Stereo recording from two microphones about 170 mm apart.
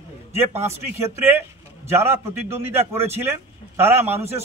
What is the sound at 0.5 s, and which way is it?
Speech, 15° right (ahead or behind).